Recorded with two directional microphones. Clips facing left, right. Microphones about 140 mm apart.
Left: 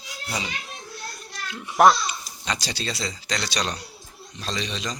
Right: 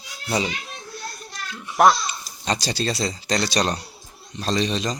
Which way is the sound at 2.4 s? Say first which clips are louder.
Right 6 dB; 35° right (ahead or behind).